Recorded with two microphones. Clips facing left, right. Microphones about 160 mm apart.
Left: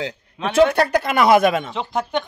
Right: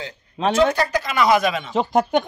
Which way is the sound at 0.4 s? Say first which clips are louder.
Right 5 dB; 35° right (ahead or behind).